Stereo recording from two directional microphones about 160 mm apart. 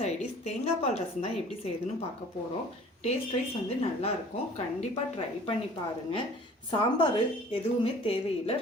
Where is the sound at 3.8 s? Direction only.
40° left (ahead or behind).